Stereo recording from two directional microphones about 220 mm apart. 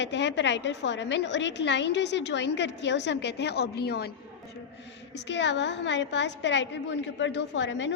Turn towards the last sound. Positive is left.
turn(degrees=55)  # may be behind; listen again after turning